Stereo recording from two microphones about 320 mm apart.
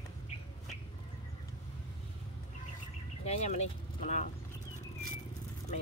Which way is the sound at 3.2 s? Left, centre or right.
Centre.